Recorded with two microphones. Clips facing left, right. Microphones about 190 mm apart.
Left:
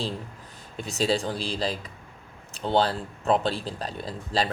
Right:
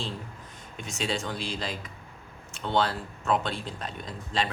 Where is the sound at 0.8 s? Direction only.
35° left (ahead or behind).